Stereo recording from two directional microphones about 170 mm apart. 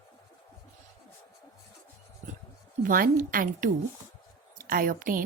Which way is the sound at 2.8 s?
55° right (ahead or behind).